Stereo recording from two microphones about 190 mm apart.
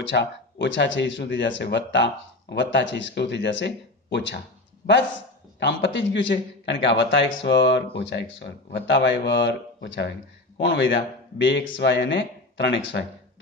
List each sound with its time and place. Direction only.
0.0 s a man's voice: 70° left (ahead or behind)
5.6 s a man's voice: 70° left (ahead or behind)